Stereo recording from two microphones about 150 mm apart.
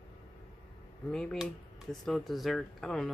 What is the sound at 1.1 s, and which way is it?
Speech, 5° left (ahead or behind).